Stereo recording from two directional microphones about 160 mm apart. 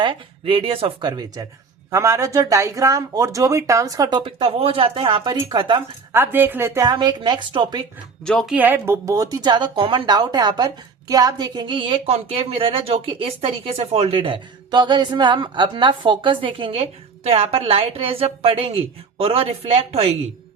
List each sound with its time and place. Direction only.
0.0 s a woman's voice: 30° right (ahead or behind)
6.1 s speech: 15° right (ahead or behind)
6.9 s speech: 30° right (ahead or behind)
8.2 s speech: 5° left (ahead or behind)
8.5 s a woman's voice: 10° right (ahead or behind); by 20.1 s 40° right (ahead or behind)